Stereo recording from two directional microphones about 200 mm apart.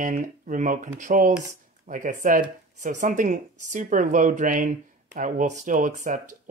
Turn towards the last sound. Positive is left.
turn(degrees=-40)  # may be behind; listen again after turning